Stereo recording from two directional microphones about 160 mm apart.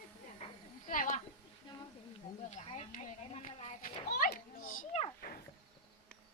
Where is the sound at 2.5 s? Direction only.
45° left (ahead or behind).